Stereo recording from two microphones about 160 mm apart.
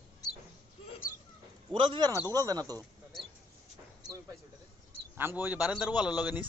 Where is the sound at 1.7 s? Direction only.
30° right (ahead or behind).